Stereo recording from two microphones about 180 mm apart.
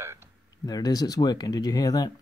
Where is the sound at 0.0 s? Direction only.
15° right (ahead or behind).